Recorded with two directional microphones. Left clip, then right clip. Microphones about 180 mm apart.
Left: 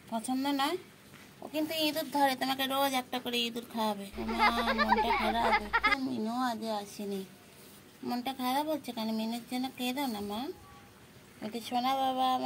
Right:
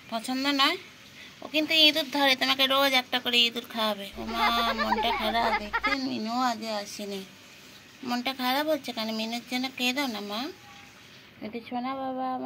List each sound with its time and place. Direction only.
0.1 s a woman's voice: 10° left (ahead or behind)
11.4 s speech: 30° left (ahead or behind)